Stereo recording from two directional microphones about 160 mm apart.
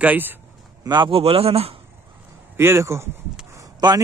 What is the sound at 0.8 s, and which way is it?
Speech, 30° right (ahead or behind).